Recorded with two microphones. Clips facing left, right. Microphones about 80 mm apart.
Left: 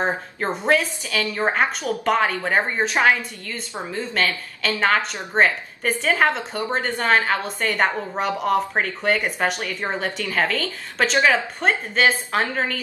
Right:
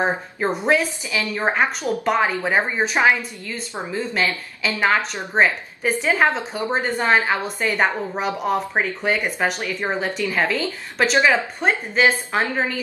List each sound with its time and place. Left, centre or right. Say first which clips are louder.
0.0 s a woman's voice: right 2 dB; centre
4.6 s a woman's voice: even; centre
9.6 s a woman's voice: right 2 dB; centre
9.8 s speech: right 2 dB; centre
10.2 s speech: right 1 dB; centre
10.5 s a woman's voice: right 2 dB; centre
11.1 s speech: right 1 dB; centre
11.6 s speech: right 1 dB; centre